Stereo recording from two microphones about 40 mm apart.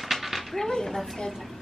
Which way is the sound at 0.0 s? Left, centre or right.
Centre.